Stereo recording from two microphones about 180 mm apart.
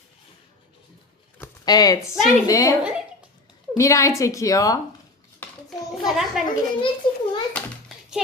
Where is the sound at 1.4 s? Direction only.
20° left (ahead or behind).